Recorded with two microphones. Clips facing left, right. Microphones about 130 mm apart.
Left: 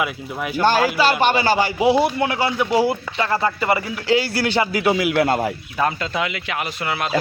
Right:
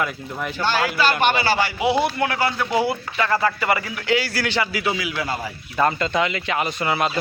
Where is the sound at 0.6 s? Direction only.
50° left (ahead or behind).